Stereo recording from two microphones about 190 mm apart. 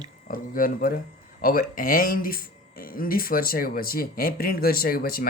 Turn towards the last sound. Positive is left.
turn(degrees=50)  # may be behind; listen again after turning